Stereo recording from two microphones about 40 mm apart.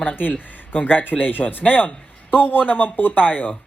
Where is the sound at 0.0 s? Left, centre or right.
Left.